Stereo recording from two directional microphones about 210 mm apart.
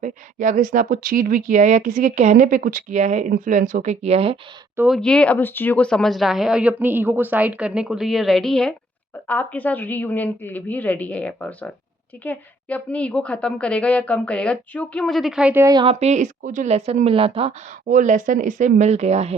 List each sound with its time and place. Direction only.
0.0 s speech: 40° right (ahead or behind)
4.8 s a woman's voice: centre (ahead or behind); by 17.5 s 25° right (ahead or behind)
17.8 s speech: 40° right (ahead or behind)